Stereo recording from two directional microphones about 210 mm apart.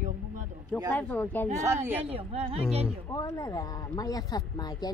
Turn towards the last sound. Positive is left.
turn(degrees=20)  # may be behind; listen again after turning